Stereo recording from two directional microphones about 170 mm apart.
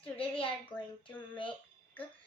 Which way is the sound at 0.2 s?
30° left (ahead or behind).